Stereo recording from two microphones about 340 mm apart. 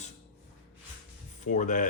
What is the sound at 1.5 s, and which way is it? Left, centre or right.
Speech, left.